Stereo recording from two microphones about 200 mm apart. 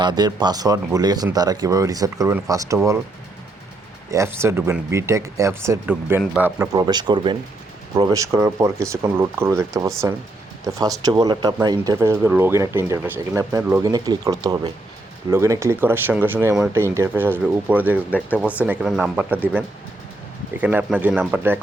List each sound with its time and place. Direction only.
0.0 s speech: 20° right (ahead or behind)
4.1 s speech: 15° right (ahead or behind)
6.7 s speech: 20° right (ahead or behind)